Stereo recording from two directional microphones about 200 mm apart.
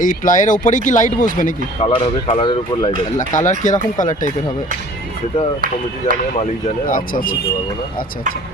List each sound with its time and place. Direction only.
0.0 s speech: 40° left (ahead or behind)
1.9 s speech: 25° left (ahead or behind)
3.2 s speech: 40° left (ahead or behind)
6.4 s speech: 35° left (ahead or behind)